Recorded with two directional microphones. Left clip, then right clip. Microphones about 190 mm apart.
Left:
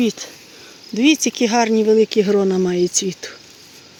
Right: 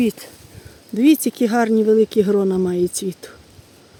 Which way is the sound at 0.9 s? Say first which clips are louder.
Even; 20° right (ahead or behind).